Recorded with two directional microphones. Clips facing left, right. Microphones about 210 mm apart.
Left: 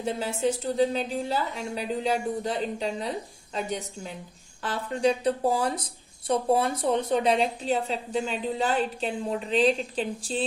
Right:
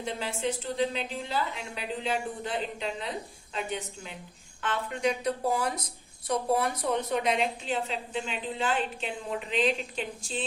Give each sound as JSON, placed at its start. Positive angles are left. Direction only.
{"t": 0.0, "sound": "a woman's voice", "side_deg": 40}